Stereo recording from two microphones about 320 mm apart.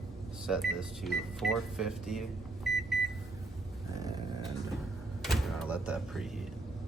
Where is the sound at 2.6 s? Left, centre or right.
Centre.